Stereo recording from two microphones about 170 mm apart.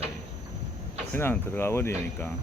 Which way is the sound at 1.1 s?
15° left (ahead or behind).